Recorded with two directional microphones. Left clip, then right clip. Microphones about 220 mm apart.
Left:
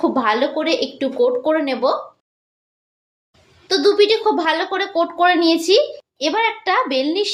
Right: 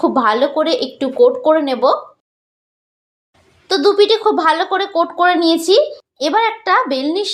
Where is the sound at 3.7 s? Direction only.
20° right (ahead or behind).